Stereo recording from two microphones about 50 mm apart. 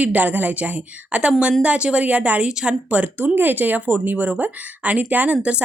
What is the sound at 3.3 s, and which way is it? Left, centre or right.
A woman's voice, right.